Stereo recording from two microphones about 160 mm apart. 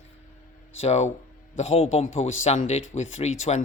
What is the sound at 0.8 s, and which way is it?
Speech, 40° left (ahead or behind).